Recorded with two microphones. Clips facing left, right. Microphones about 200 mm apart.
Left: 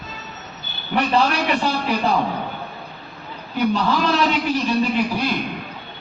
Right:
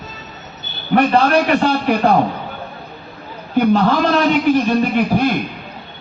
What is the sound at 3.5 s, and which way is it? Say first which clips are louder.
A man's voice: right 6 dB; 55° right (ahead or behind).